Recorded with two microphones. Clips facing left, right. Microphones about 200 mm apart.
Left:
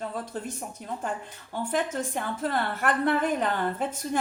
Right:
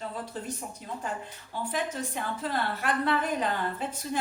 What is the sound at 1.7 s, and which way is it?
A woman's voice, 50° left (ahead or behind).